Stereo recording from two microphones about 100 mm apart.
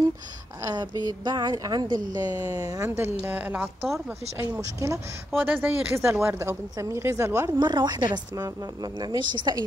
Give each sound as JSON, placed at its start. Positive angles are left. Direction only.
{"t": 0.7, "sound": "a woman's voice", "side_deg": -40}
{"t": 2.3, "sound": "speech", "side_deg": -30}
{"t": 4.4, "sound": "speech", "side_deg": -30}
{"t": 5.3, "sound": "speech", "side_deg": -20}
{"t": 7.5, "sound": "a woman's voice", "side_deg": -45}